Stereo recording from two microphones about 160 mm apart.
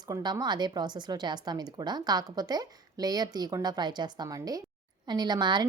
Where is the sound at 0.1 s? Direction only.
25° right (ahead or behind).